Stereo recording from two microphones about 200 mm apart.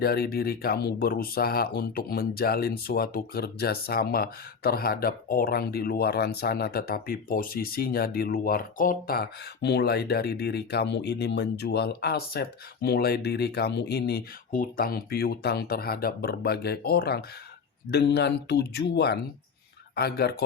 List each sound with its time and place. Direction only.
0.0 s speech: 50° left (ahead or behind)